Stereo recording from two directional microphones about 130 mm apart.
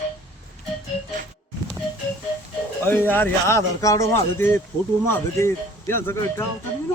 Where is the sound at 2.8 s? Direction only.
15° left (ahead or behind).